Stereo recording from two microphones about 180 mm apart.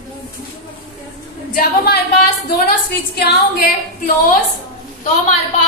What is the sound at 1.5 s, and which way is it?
Speech, 55° left (ahead or behind).